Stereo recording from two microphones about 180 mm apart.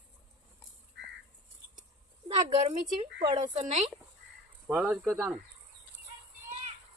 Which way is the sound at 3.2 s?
30° right (ahead or behind).